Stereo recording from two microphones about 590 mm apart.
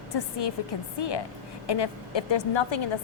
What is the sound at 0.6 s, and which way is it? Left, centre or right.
A woman's voice, left.